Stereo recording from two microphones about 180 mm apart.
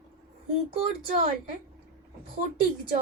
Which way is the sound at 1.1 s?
50° right (ahead or behind).